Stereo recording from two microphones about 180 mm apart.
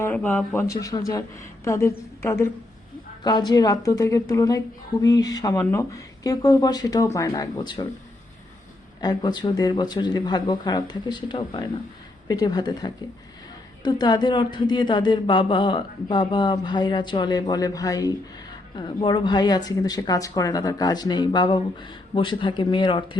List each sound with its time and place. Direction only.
0.0 s a woman's voice: 10° left (ahead or behind)
9.0 s a woman's voice: 25° left (ahead or behind)